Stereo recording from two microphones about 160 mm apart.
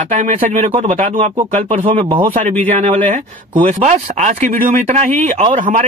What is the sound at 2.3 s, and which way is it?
Speech, 55° right (ahead or behind).